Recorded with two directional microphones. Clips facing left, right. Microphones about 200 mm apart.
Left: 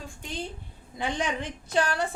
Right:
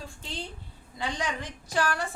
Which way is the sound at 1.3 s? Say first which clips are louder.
Left 3 dB; 25° left (ahead or behind).